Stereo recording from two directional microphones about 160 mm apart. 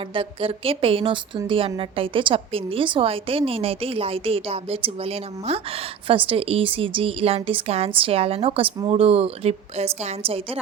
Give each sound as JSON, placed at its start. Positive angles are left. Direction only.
{"t": 0.1, "sound": "a woman's voice", "side_deg": -35}